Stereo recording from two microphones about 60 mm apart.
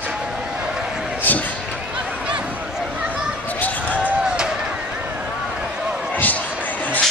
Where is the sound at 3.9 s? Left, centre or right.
Right.